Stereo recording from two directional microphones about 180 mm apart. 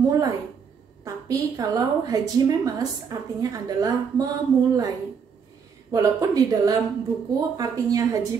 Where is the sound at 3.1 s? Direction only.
20° right (ahead or behind).